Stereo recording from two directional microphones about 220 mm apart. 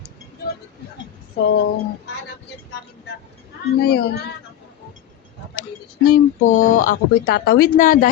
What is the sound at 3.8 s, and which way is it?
Speech, 45° left (ahead or behind).